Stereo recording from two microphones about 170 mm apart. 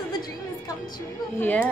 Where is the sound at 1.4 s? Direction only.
10° left (ahead or behind).